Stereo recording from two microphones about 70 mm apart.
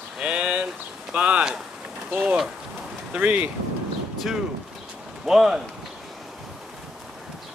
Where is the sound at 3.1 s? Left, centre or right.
Right.